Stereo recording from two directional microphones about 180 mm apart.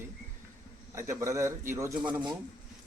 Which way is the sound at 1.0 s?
15° right (ahead or behind).